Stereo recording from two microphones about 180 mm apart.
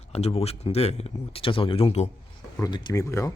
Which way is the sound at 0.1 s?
35° left (ahead or behind).